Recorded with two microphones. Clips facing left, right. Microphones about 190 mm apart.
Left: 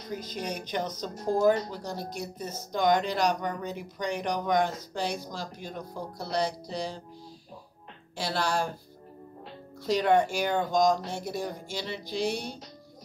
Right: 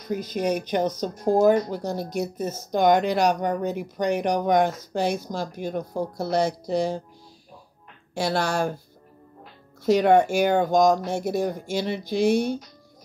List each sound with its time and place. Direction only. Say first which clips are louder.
0.1 s a woman's voice: right 10 dB; 50° right (ahead or behind)
8.1 s a woman's voice: right 5 dB; 50° right (ahead or behind)
9.8 s a woman's voice: right 6 dB; 50° right (ahead or behind)